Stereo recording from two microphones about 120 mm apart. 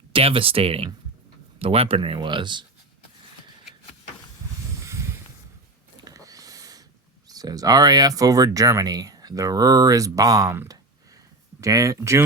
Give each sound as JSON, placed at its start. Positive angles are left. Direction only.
{"t": 0.1, "sound": "speech", "side_deg": -50}
{"t": 4.8, "sound": "a sound", "side_deg": -25}
{"t": 7.3, "sound": "speech", "side_deg": -30}